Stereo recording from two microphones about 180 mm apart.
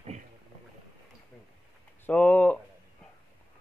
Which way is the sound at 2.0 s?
10° left (ahead or behind).